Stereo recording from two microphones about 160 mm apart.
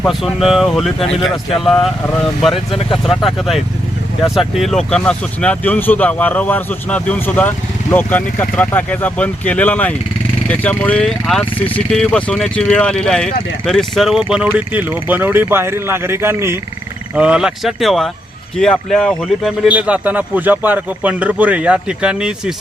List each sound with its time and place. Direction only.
0.1 s speech: centre (ahead or behind)
0.9 s speech: 40° left (ahead or behind)
1.6 s speech: centre (ahead or behind)
3.0 s speech: centre (ahead or behind)